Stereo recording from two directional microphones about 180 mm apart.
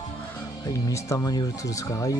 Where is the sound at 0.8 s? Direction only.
20° left (ahead or behind).